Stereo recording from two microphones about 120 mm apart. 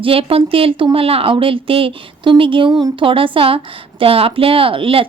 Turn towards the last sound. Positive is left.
turn(degrees=-50)  # may be behind; listen again after turning